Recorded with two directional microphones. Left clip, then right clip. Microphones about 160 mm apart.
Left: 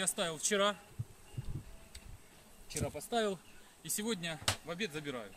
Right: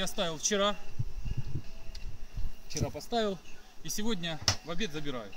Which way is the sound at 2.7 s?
15° left (ahead or behind).